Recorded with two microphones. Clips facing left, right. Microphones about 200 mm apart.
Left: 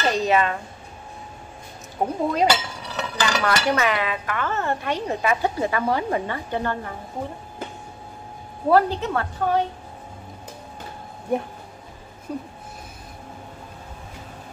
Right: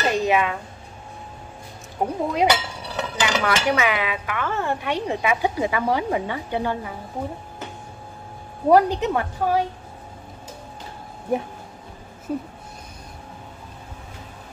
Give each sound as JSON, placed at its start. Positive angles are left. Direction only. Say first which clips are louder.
{"t": 0.1, "sound": "speech", "louder": "left 1 dB", "side_deg": -15}
{"t": 2.0, "sound": "speech", "louder": "even", "side_deg": -10}
{"t": 8.6, "sound": "speech", "louder": "right 2 dB", "side_deg": -15}
{"t": 11.3, "sound": "speech", "louder": "even", "side_deg": 0}